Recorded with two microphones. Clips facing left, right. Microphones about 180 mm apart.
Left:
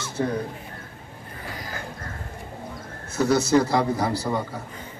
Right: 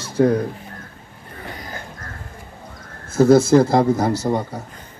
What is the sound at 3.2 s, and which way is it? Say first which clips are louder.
Speech: right 7 dB; 50° right (ahead or behind).